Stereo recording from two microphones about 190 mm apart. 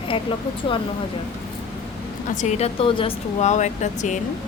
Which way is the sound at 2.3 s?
35° left (ahead or behind).